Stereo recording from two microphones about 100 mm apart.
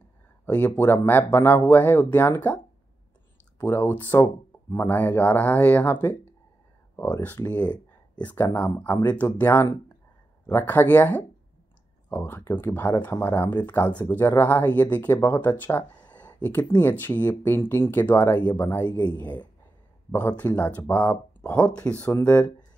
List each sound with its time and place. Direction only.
0.5 s speech: 15° left (ahead or behind)